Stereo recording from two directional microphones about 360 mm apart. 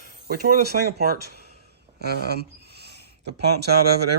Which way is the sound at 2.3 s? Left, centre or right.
Right.